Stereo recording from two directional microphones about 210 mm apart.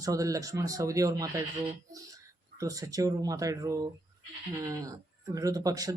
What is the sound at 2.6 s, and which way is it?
Speech, 15° right (ahead or behind).